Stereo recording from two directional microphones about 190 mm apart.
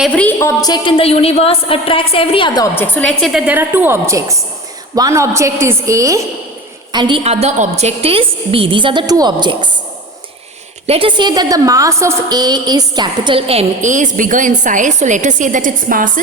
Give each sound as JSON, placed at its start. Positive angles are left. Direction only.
{"t": 0.0, "sound": "a woman's voice", "side_deg": 5}
{"t": 2.7, "sound": "a woman's voice", "side_deg": 10}
{"t": 10.8, "sound": "a woman's voice", "side_deg": -30}